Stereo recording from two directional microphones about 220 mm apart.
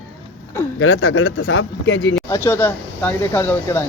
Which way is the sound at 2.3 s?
10° left (ahead or behind).